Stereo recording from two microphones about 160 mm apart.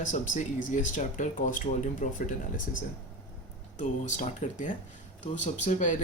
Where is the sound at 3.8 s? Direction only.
50° left (ahead or behind).